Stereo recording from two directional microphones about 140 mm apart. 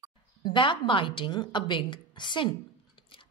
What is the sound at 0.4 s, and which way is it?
A woman's voice, 35° left (ahead or behind).